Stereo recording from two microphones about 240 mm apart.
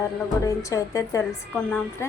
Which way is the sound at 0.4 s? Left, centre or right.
Centre.